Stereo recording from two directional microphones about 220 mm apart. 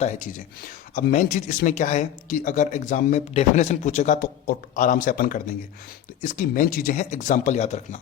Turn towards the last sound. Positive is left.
turn(degrees=30)  # may be behind; listen again after turning